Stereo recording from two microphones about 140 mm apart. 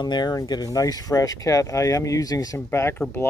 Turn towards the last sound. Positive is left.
turn(degrees=15)  # may be behind; listen again after turning